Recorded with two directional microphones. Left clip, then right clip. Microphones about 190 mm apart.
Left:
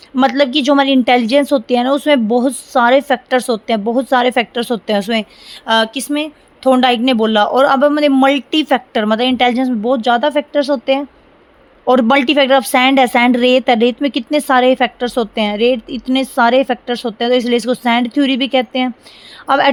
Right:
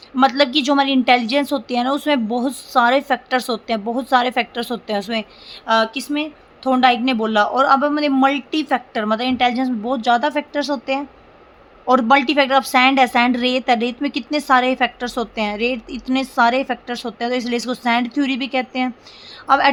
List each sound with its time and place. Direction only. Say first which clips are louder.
0.2 s a woman's voice: left 2 dB; 35° left (ahead or behind)